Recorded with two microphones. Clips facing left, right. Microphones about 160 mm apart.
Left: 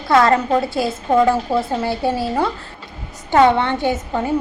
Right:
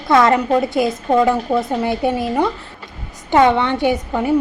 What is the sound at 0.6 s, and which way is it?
A woman's voice, 20° right (ahead or behind).